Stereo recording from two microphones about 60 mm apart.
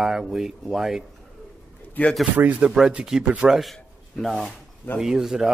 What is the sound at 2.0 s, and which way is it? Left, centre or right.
Speech, left.